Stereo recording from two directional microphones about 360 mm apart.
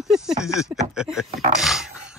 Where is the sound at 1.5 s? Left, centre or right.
Centre.